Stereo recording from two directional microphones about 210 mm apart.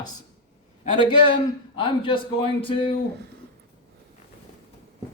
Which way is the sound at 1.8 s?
25° left (ahead or behind).